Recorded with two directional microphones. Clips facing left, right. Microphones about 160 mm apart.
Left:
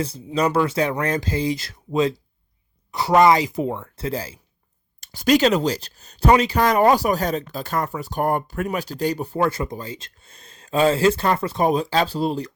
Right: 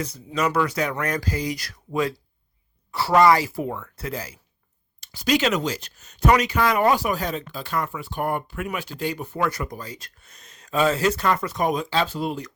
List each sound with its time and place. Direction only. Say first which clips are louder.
0.0 s speech: left 3 dB; 30° left (ahead or behind)
4.9 s a sound: left 5 dB; 50° left (ahead or behind)
5.5 s speech: left 4 dB; 35° left (ahead or behind)